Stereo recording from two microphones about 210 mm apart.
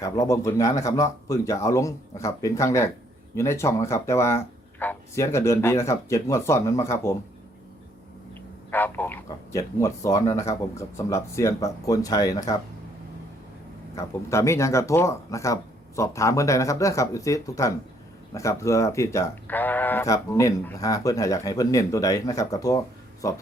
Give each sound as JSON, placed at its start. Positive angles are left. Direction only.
{"t": 0.0, "sound": "speech", "side_deg": 15}
{"t": 8.7, "sound": "speech", "side_deg": 10}
{"t": 13.9, "sound": "speech", "side_deg": 15}